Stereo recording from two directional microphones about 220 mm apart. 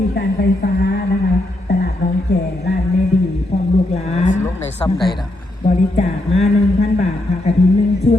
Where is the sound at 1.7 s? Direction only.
45° left (ahead or behind).